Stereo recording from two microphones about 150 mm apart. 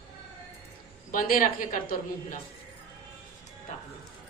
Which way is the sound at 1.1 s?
65° left (ahead or behind).